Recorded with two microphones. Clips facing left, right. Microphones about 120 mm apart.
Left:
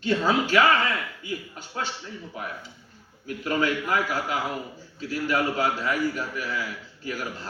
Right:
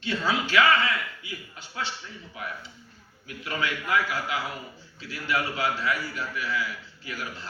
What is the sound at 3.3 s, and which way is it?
A man's voice, 40° left (ahead or behind).